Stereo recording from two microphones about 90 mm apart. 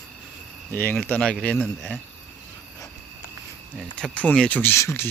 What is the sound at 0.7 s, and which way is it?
Speech, 25° left (ahead or behind).